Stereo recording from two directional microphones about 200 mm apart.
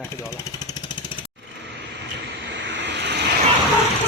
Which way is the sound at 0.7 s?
20° left (ahead or behind).